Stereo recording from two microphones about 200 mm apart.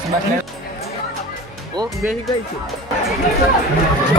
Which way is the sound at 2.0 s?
Centre (ahead or behind).